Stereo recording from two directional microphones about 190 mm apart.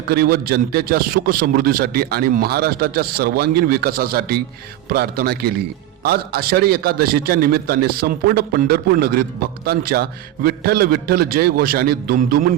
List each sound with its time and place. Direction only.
0.1 s a man's voice: 55° right (ahead or behind)